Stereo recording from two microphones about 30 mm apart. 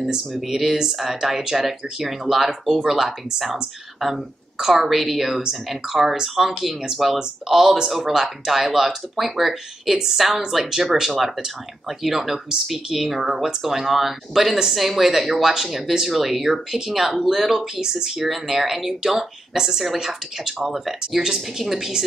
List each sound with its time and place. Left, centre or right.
0.5 s speech: centre
4.6 s a woman's voice: centre
4.8 s speech: centre